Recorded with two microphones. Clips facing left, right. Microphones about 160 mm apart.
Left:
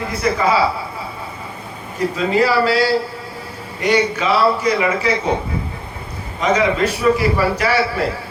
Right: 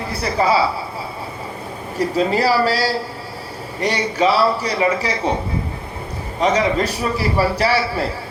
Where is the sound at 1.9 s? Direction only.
35° right (ahead or behind).